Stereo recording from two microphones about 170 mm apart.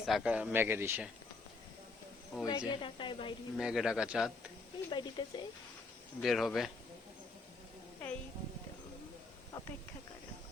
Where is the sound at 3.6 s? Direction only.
5° right (ahead or behind).